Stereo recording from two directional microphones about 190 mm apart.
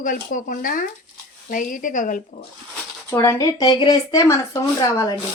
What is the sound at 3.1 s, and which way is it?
Speech, 15° left (ahead or behind).